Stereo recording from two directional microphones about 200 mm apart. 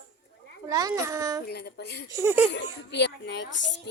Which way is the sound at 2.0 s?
15° right (ahead or behind).